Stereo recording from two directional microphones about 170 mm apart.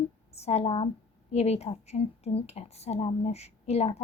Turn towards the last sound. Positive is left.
turn(degrees=40)  # may be behind; listen again after turning